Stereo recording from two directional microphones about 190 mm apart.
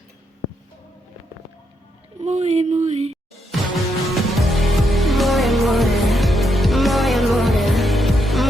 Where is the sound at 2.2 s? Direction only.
35° right (ahead or behind).